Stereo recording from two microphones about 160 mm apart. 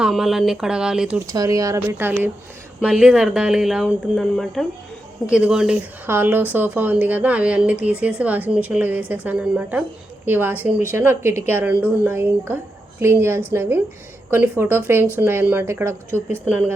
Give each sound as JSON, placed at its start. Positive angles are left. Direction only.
{"t": 0.0, "sound": "speech", "side_deg": 0}
{"t": 1.3, "sound": "a woman's voice", "side_deg": -20}